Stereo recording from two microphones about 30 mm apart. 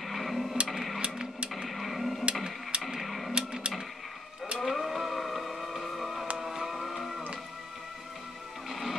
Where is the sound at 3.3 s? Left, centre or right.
Right.